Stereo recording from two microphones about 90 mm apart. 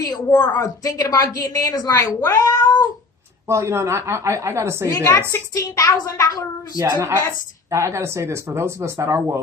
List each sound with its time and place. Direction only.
0.0 s a woman's voice: 45° left (ahead or behind)
3.5 s speech: 30° right (ahead or behind)
5.0 s a woman's voice: 35° left (ahead or behind)
6.7 s a woman's voice: 45° right (ahead or behind)
7.7 s speech: 30° right (ahead or behind)